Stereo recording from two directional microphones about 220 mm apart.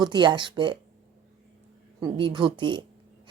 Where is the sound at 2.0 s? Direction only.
20° right (ahead or behind).